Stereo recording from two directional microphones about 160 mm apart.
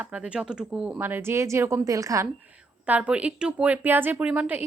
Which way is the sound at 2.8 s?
10° right (ahead or behind).